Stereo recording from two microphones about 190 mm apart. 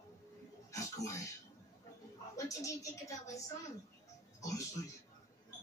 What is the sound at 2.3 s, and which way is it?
A woman's voice, 15° left (ahead or behind).